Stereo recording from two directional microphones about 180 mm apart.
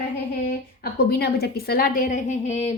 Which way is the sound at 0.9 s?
60° left (ahead or behind).